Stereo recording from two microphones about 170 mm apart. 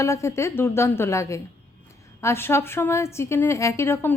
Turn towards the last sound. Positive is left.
turn(degrees=15)  # may be behind; listen again after turning